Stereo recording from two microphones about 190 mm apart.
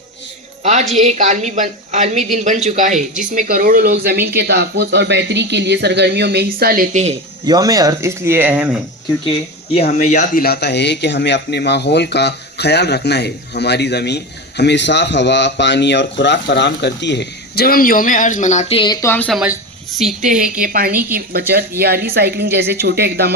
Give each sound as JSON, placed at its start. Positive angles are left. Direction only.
{"t": 0.6, "sound": "a woman's voice", "side_deg": -35}
{"t": 6.9, "sound": "speech", "side_deg": -35}
{"t": 7.4, "sound": "speech", "side_deg": -20}
{"t": 9.7, "sound": "speech", "side_deg": 35}
{"t": 19.4, "sound": "speech", "side_deg": -5}
{"t": 20.2, "sound": "a woman's voice", "side_deg": -45}